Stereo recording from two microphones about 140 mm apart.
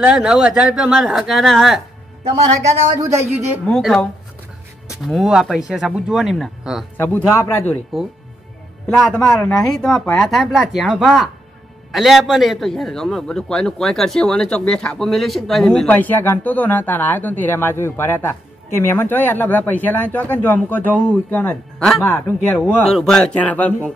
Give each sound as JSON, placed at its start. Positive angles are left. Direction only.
{"t": 0.0, "sound": "speech", "side_deg": -5}
{"t": 3.6, "sound": "speech", "side_deg": 5}
{"t": 7.0, "sound": "a man's voice", "side_deg": 15}
{"t": 8.8, "sound": "a man's voice", "side_deg": 5}
{"t": 22.8, "sound": "a man's voice", "side_deg": 5}